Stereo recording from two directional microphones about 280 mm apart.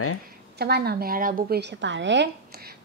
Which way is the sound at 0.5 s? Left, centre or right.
Right.